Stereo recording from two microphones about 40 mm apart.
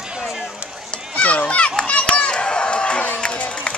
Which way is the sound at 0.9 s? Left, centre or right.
Left.